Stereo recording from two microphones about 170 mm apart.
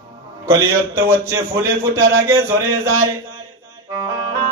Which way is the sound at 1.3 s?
15° right (ahead or behind).